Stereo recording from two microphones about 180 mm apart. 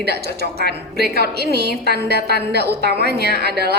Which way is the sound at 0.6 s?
60° right (ahead or behind).